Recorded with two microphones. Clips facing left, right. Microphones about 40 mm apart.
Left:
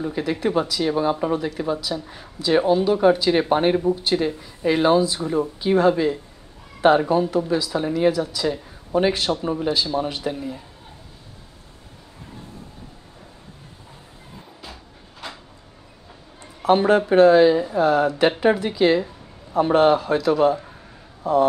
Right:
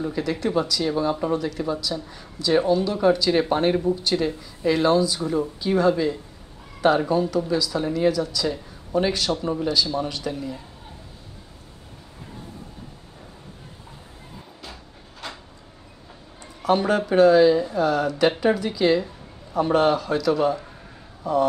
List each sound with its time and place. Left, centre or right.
0.1 s speech: centre
14.6 s a sound: centre
16.6 s speech: left; by 20.7 s centre